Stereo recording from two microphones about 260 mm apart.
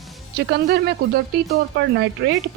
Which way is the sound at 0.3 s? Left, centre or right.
Right.